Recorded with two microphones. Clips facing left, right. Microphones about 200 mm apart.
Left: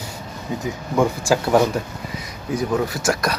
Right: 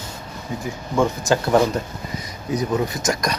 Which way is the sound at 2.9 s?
5° left (ahead or behind).